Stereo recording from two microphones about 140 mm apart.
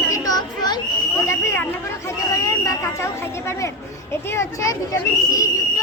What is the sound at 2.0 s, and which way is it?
Chatter, 25° left (ahead or behind).